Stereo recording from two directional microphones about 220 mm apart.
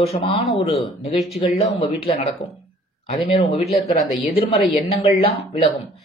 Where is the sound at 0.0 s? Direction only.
25° left (ahead or behind).